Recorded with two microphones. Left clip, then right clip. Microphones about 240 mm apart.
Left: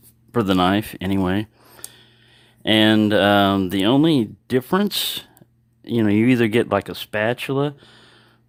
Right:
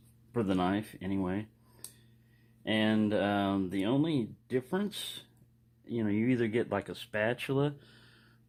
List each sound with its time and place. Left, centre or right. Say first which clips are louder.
0.3 s speech: left 13 dB; left